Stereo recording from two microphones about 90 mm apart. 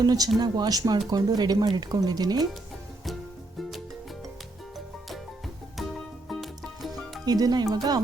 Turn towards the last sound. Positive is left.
turn(degrees=-45)  # may be behind; listen again after turning